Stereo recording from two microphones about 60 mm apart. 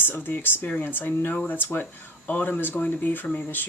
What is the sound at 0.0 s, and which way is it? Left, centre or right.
Speech, left.